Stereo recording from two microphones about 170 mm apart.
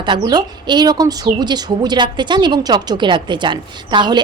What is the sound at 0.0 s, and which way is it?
A woman's voice, 30° right (ahead or behind).